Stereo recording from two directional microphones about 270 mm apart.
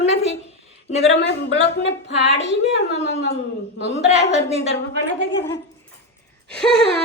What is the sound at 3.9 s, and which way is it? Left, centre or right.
Speech, left.